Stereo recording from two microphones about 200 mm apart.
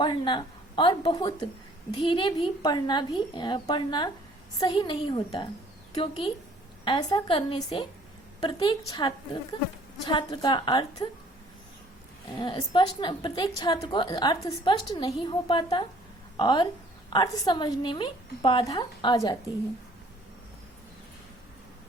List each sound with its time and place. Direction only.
0.0 s a woman's voice: 25° left (ahead or behind)
12.4 s a woman's voice: 20° left (ahead or behind)